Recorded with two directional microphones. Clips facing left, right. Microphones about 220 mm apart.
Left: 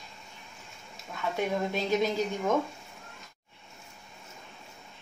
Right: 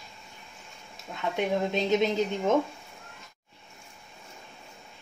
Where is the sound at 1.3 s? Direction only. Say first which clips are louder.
Right 3 dB; 20° right (ahead or behind).